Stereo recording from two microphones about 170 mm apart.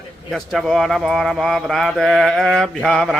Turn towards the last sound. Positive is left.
turn(degrees=5)  # may be behind; listen again after turning